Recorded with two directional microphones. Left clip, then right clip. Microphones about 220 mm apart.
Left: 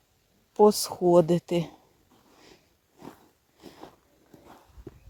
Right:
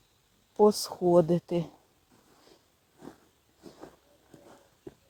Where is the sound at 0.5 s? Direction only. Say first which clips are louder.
Left 3 dB; 15° left (ahead or behind).